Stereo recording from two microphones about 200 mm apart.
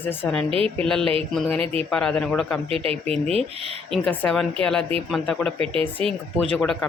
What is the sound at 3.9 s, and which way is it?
Speech, 5° left (ahead or behind).